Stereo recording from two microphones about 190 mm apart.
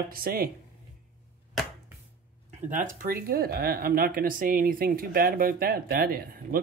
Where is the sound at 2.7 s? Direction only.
45° right (ahead or behind).